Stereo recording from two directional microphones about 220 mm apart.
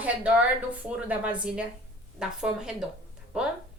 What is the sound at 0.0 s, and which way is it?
A woman's voice, 5° right (ahead or behind).